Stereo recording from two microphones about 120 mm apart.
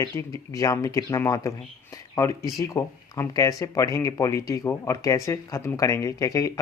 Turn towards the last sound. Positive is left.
turn(degrees=30)  # may be behind; listen again after turning